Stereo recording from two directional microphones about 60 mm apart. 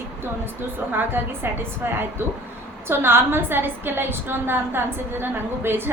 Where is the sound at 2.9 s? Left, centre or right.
Right.